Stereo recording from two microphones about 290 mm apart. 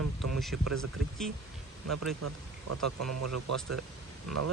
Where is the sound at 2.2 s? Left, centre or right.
Right.